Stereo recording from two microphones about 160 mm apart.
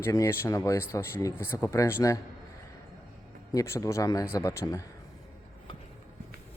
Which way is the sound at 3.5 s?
20° left (ahead or behind).